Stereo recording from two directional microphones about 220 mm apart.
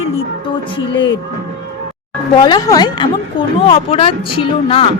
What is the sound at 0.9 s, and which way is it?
Speech, 60° left (ahead or behind).